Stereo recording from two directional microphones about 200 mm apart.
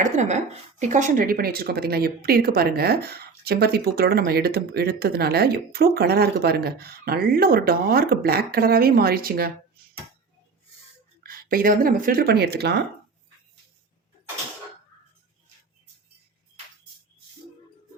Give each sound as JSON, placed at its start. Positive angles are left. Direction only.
{"t": 0.0, "sound": "a woman's voice", "side_deg": -35}
{"t": 11.2, "sound": "speech", "side_deg": -45}